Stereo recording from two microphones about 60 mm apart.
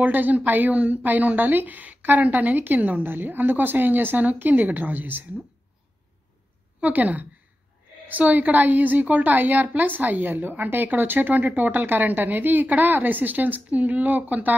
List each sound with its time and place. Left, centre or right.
0.0 s a woman's voice: right
6.8 s a woman's voice: right